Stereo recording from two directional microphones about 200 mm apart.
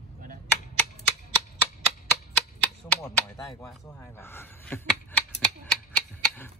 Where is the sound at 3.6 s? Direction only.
10° left (ahead or behind).